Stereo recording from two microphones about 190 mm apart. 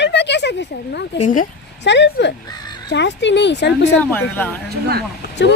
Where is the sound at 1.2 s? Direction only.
45° left (ahead or behind).